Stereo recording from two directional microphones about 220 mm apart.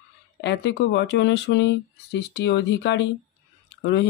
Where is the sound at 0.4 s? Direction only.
50° left (ahead or behind).